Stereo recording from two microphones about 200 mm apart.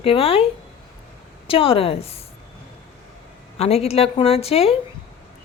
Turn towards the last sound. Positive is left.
turn(degrees=30)  # may be behind; listen again after turning